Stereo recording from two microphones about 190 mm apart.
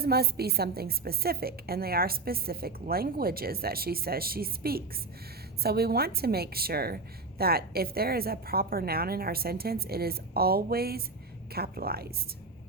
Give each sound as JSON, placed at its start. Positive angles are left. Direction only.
{"t": 0.0, "sound": "a woman's voice", "side_deg": -55}